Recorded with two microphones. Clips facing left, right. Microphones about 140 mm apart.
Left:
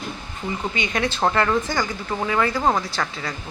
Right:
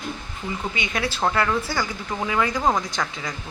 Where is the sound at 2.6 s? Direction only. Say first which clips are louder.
Even; 10° left (ahead or behind).